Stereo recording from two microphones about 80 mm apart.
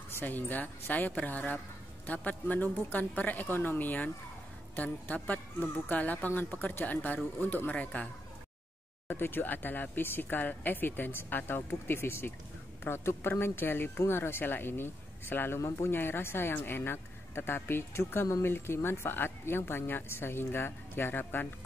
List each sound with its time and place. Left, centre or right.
0.1 s speech: left